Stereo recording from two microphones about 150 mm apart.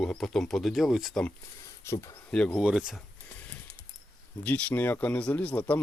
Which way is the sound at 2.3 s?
5° left (ahead or behind).